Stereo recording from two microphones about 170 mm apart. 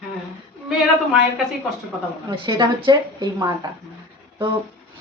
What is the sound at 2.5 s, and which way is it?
A woman's voice, 25° right (ahead or behind).